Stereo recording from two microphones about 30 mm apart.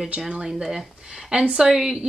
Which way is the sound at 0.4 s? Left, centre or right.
Centre.